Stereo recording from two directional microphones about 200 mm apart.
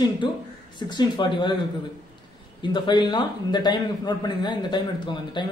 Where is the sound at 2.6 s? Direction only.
25° left (ahead or behind).